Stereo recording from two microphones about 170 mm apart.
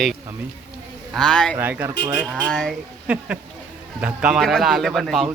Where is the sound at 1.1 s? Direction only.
5° left (ahead or behind).